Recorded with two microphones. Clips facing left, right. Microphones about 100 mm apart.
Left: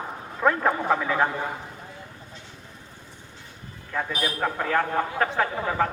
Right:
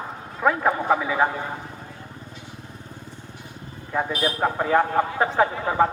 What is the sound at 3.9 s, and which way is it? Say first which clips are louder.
A man's voice: right 4 dB; 15° right (ahead or behind).